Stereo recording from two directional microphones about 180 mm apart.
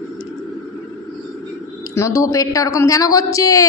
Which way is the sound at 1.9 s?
15° left (ahead or behind).